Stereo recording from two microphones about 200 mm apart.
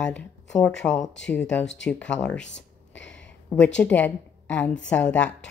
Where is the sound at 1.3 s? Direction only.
5° left (ahead or behind).